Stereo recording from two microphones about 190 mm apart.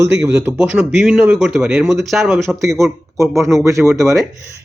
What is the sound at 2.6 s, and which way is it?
Speech, 15° right (ahead or behind).